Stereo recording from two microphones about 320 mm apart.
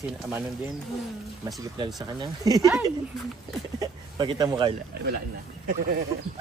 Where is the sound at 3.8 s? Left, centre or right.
Centre.